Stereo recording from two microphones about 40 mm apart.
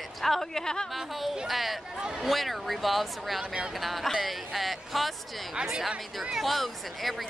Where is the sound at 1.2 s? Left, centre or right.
Centre.